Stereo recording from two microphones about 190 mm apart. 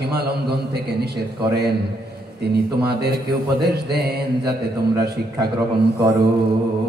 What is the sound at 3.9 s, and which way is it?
Speech, 60° right (ahead or behind).